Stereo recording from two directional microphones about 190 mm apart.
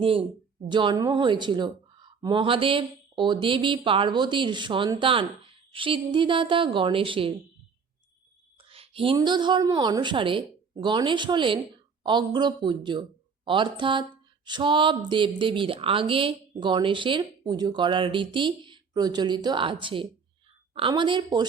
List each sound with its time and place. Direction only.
0.0 s speech: 30° right (ahead or behind)
8.5 s a woman's voice: 30° right (ahead or behind)